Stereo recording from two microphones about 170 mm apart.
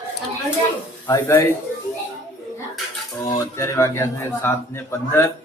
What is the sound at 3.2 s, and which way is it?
A man's voice, 15° left (ahead or behind).